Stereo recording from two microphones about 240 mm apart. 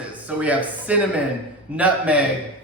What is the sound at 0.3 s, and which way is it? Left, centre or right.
A man's voice, centre.